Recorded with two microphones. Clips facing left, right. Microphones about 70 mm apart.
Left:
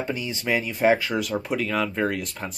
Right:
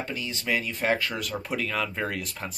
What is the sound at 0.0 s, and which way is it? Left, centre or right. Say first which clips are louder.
Speech: left 4 dB; centre.